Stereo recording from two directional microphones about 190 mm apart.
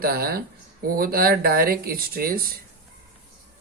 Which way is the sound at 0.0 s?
50° right (ahead or behind).